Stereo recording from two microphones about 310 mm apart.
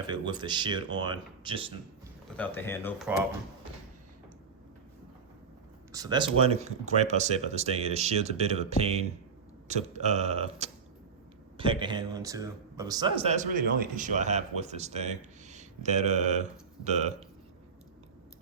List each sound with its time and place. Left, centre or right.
0.1 s speech: centre
2.3 s speech: centre
5.9 s speech: centre